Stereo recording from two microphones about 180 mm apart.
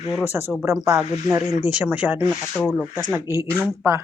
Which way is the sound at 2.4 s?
5° left (ahead or behind).